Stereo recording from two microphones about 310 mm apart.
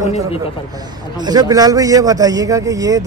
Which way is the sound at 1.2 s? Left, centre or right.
Centre.